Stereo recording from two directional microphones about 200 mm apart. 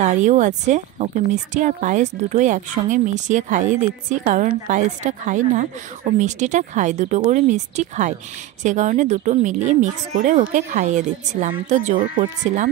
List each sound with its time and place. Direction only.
0.0 s speech: 35° right (ahead or behind)